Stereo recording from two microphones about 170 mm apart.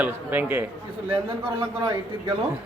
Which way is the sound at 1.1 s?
30° right (ahead or behind).